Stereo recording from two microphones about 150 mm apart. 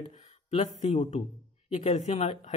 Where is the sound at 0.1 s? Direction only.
50° left (ahead or behind).